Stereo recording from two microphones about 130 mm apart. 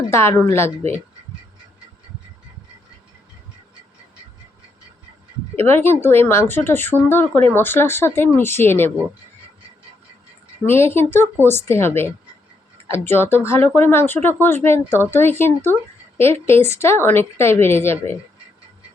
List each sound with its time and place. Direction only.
0.1 s a woman's voice: 20° left (ahead or behind)
5.5 s speech: 20° left (ahead or behind)
10.7 s a woman's voice: 20° left (ahead or behind)